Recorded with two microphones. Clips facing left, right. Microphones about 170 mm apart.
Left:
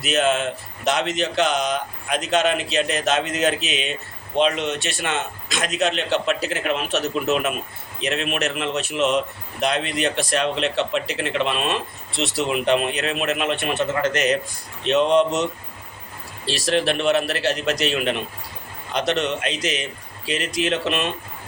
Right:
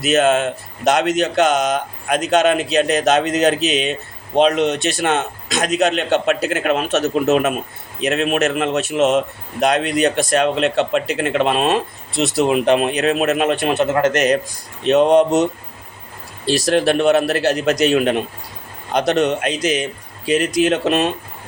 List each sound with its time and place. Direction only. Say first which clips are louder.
0.0 s a man's voice: right 5 dB; 45° right (ahead or behind)
16.5 s a man's voice: right 6 dB; 45° right (ahead or behind)